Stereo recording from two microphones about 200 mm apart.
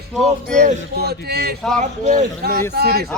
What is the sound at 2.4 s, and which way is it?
Speech, 50° right (ahead or behind).